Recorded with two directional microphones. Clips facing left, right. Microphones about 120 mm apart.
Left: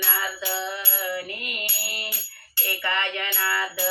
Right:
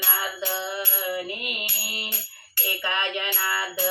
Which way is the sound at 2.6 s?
20° right (ahead or behind).